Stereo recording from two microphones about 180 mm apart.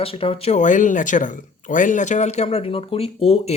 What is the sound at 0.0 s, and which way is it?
Speech, 30° left (ahead or behind).